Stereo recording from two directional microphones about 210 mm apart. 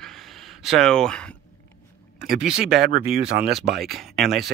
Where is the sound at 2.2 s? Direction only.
5° right (ahead or behind).